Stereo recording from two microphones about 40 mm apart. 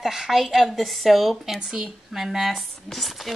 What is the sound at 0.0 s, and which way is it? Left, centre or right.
A woman's voice, centre.